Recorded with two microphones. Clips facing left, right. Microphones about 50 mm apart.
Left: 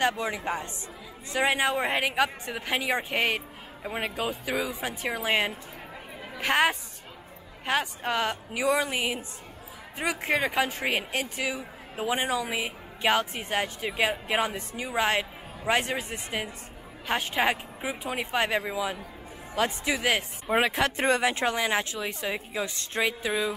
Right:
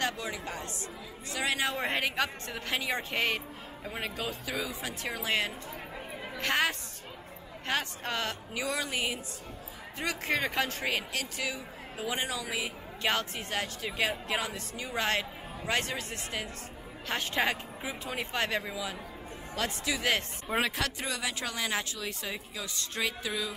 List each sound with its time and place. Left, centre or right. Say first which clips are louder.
0.0 s a woman's voice: left 6 dB; left
1.8 s a woman's voice: left 5 dB; centre
10.8 s a woman's voice: left 4 dB; left
13.0 s a woman's voice: left 6 dB; centre
20.7 s a woman's voice: left 9 dB; left